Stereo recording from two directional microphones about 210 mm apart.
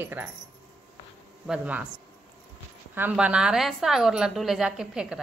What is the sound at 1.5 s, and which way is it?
Speech, 5° right (ahead or behind).